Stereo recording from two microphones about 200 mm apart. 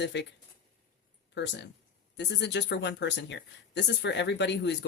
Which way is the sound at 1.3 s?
60° left (ahead or behind).